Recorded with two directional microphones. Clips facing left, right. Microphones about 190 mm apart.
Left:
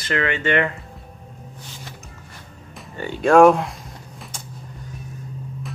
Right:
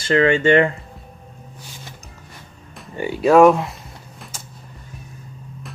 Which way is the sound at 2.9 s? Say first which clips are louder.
Right 1 dB; 5° right (ahead or behind).